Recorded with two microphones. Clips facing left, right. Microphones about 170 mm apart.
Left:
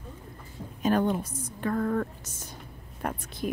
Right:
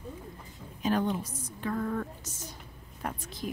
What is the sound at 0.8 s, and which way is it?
A woman's voice, 50° left (ahead or behind).